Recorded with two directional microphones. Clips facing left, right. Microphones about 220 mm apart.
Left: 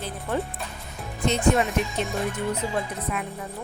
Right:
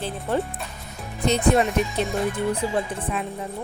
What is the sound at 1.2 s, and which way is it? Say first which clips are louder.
Speech: right 2 dB; 35° right (ahead or behind).